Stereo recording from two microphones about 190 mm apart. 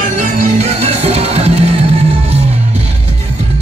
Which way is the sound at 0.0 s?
35° right (ahead or behind).